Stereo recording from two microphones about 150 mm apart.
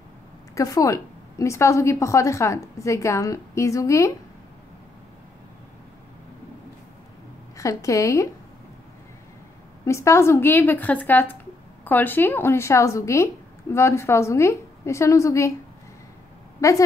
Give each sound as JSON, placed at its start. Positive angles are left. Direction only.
{"t": 0.6, "sound": "a woman's voice", "side_deg": 25}
{"t": 7.5, "sound": "a woman's voice", "side_deg": 20}
{"t": 9.8, "sound": "a woman's voice", "side_deg": 20}
{"t": 16.6, "sound": "a woman's voice", "side_deg": 20}